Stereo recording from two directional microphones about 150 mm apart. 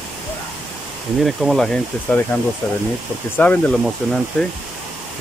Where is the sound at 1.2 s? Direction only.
Centre (ahead or behind).